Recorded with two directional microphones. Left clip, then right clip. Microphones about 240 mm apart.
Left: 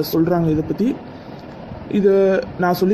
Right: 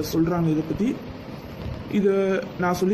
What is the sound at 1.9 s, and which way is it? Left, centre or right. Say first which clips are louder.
Speech: left 7 dB; centre.